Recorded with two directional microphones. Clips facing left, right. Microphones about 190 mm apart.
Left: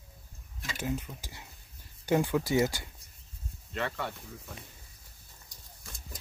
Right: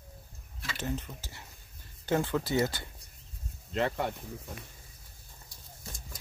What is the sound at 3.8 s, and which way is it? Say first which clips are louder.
Speech: right 4 dB; 45° right (ahead or behind).